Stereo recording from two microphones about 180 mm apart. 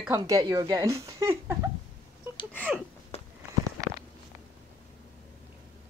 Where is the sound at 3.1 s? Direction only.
35° left (ahead or behind).